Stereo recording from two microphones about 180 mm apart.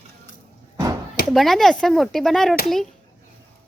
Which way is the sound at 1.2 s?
Centre (ahead or behind).